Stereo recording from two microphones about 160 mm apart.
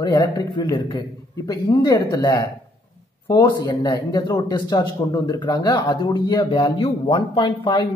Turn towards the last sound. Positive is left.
turn(degrees=30)  # may be behind; listen again after turning